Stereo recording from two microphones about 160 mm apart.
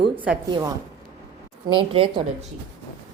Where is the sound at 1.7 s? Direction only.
30° right (ahead or behind).